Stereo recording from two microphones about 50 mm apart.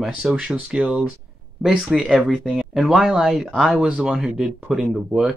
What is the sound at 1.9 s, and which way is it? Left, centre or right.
Speech, centre.